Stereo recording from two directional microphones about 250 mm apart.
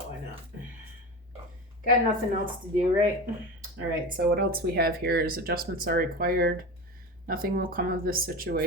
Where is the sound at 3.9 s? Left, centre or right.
Right.